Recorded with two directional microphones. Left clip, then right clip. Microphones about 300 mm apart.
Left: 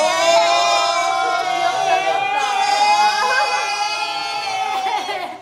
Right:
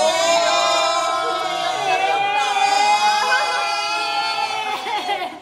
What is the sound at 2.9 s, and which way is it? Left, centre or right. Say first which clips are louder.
Music: left 1 dB; centre.